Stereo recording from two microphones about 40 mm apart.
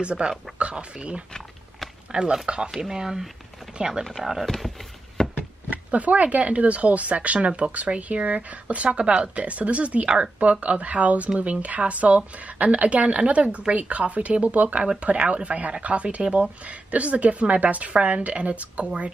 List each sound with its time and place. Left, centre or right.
0.0 s a woman's voice: right
2.4 s a woman's voice: right
2.8 s speech: centre
3.7 s chopping: centre
4.2 s speech: centre
5.2 s a sound: centre
5.7 s speech: right
10.0 s a woman's voice: right
10.4 s speech: right